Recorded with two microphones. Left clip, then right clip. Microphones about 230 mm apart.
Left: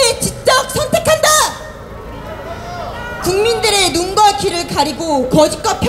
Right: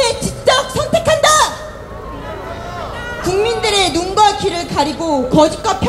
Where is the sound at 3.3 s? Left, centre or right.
Left.